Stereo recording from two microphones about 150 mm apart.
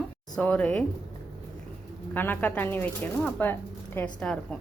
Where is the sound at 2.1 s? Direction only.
15° left (ahead or behind).